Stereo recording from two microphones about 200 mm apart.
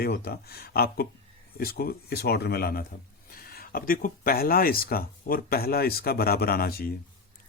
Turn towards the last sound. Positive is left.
turn(degrees=50)  # may be behind; listen again after turning